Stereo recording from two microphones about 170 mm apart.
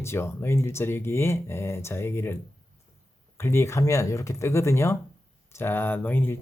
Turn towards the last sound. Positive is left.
turn(degrees=10)  # may be behind; listen again after turning